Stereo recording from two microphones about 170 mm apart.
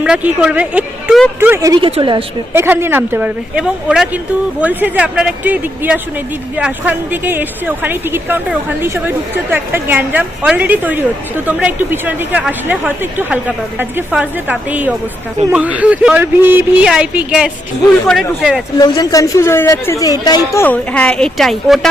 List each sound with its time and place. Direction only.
0.0 s speech: 5° right (ahead or behind)
1.8 s a woman's voice: 30° right (ahead or behind)
2.5 s speech: 15° right (ahead or behind)
18.8 s a woman's voice: 20° left (ahead or behind); by 21.8 s centre (ahead or behind)